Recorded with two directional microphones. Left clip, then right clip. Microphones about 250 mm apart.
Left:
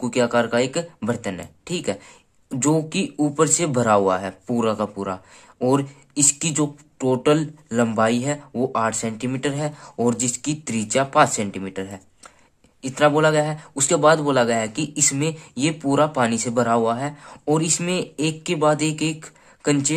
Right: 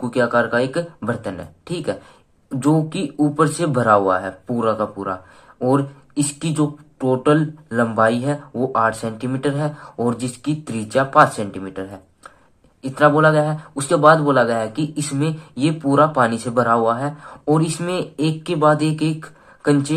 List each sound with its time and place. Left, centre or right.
0.0 s a man's voice: centre